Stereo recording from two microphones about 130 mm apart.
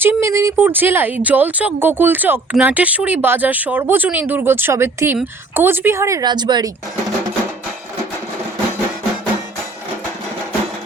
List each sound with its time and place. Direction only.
0.0 s speech: 20° right (ahead or behind)